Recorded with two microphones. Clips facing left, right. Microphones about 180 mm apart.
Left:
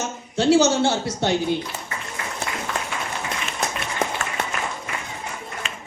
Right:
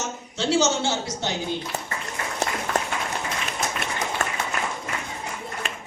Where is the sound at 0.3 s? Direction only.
60° left (ahead or behind).